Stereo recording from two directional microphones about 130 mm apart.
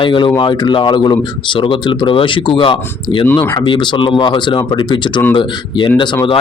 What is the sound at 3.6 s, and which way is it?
Speech, 40° left (ahead or behind).